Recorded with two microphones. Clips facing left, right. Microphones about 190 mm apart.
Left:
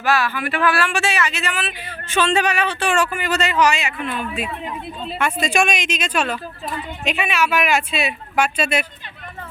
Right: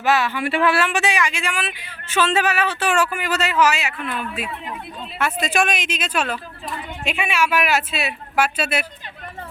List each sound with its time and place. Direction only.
0.0 s speech: 20° right (ahead or behind); by 8.9 s 5° right (ahead or behind)